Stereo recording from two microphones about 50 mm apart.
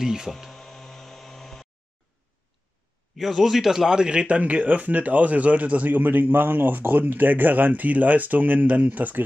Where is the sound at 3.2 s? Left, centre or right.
Centre.